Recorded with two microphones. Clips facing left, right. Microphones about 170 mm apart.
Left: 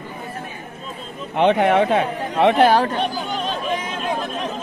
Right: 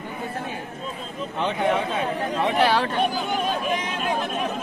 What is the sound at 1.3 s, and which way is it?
A man's voice, 70° left (ahead or behind).